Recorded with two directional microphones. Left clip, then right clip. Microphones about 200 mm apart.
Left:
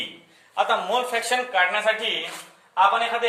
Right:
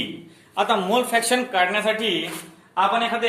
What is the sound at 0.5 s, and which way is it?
A man's voice, 25° right (ahead or behind).